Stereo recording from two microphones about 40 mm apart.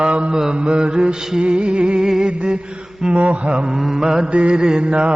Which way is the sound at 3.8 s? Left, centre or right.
Centre.